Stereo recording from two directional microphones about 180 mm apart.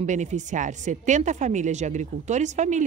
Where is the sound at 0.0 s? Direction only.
40° right (ahead or behind).